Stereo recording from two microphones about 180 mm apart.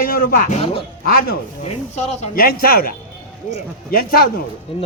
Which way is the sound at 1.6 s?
35° left (ahead or behind).